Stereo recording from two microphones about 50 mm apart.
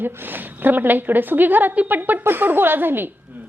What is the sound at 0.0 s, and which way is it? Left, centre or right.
A woman's voice, right.